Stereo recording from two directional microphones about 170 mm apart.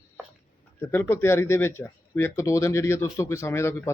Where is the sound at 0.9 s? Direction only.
15° left (ahead or behind).